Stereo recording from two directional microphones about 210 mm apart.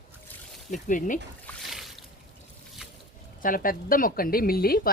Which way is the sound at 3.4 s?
40° left (ahead or behind).